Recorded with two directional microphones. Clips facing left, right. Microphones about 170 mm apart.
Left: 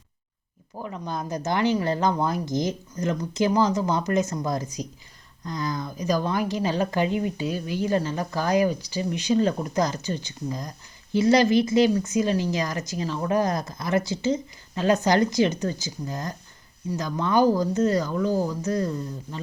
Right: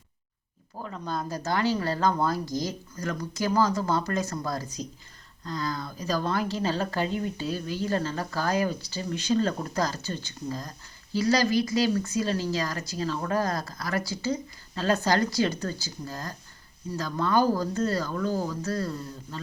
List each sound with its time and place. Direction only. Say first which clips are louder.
0.8 s speech: left 1 dB; 15° left (ahead or behind)